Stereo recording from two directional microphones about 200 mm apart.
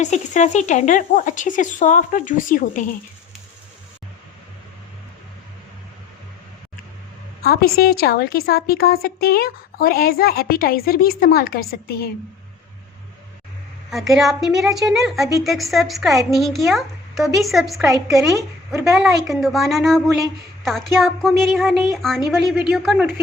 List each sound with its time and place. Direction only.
0.0 s speech: 35° left (ahead or behind)
7.4 s a woman's voice: 50° left (ahead or behind)
13.9 s a woman's voice: centre (ahead or behind)
18.7 s speech: 15° right (ahead or behind)
18.9 s a woman's voice: centre (ahead or behind)